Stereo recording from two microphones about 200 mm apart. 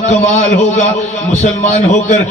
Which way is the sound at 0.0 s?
35° left (ahead or behind).